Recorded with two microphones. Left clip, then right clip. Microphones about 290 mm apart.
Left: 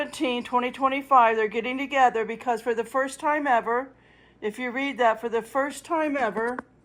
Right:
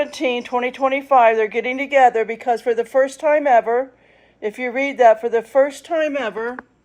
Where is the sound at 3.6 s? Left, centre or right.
Centre.